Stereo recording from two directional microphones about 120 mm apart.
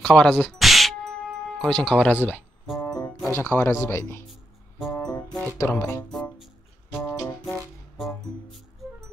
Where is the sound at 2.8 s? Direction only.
30° left (ahead or behind).